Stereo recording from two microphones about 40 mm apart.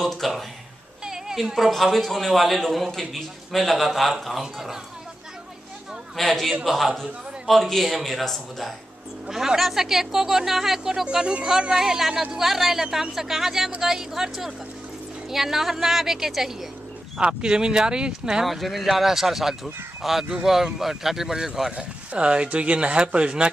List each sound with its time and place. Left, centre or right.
0.0 s a sound: centre
1.3 s a woman's voice: centre
6.1 s a man's voice: centre
17.2 s speech: right
18.4 s a man's voice: centre; by 23.5 s right